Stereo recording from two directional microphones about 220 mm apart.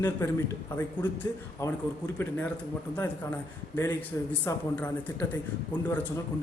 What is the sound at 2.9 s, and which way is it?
Speech, 5° left (ahead or behind).